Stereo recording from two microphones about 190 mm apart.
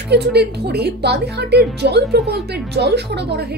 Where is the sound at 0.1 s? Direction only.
60° right (ahead or behind).